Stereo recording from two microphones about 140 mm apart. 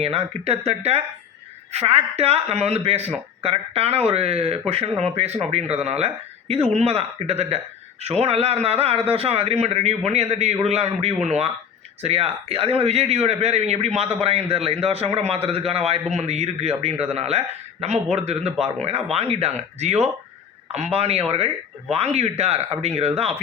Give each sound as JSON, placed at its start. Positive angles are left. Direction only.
{"t": 0.0, "sound": "a man's voice", "side_deg": -45}